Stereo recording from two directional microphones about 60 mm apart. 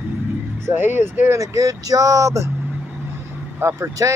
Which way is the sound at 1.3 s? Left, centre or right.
Right.